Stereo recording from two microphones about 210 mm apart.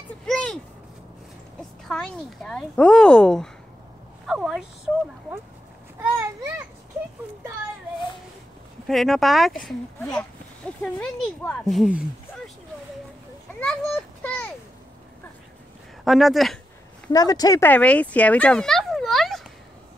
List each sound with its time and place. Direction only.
0.3 s a sound: 5° left (ahead or behind)
1.6 s a woman's voice: 5° left (ahead or behind)
8.8 s a woman's voice: centre (ahead or behind)
10.8 s a woman's voice: 5° left (ahead or behind)
13.6 s a sound: 5° left (ahead or behind)
16.0 s a woman's voice: centre (ahead or behind)
17.1 s a child's voice: 20° left (ahead or behind); by 19.4 s centre (ahead or behind)